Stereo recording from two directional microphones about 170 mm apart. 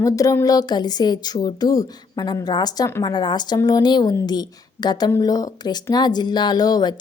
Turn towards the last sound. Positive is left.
turn(degrees=25)  # may be behind; listen again after turning